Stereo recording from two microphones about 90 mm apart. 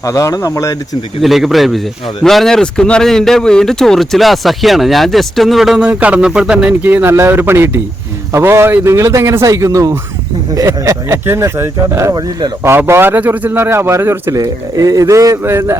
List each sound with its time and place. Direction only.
0.0 s speech: 35° left (ahead or behind)
1.2 s speech: centre (ahead or behind)
5.9 s speech: 15° right (ahead or behind)
6.8 s a man's voice: 25° right (ahead or behind)